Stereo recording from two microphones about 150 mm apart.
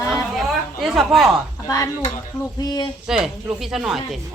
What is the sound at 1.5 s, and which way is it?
Speech, 20° left (ahead or behind).